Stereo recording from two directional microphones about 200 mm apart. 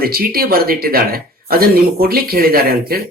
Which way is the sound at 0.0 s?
50° right (ahead or behind).